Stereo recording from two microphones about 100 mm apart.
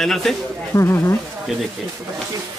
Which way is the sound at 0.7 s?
25° left (ahead or behind).